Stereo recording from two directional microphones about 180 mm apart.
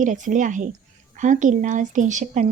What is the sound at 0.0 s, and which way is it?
A woman's voice, 45° right (ahead or behind).